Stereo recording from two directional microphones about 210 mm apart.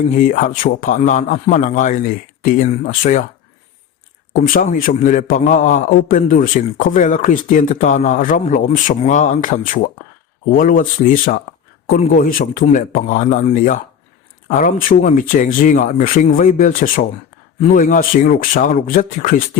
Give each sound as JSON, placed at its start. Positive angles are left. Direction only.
{"t": 0.2, "sound": "a man's voice", "side_deg": 40}
{"t": 4.4, "sound": "a man's voice", "side_deg": 40}